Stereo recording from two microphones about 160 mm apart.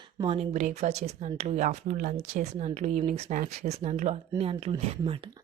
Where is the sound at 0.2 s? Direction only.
35° right (ahead or behind).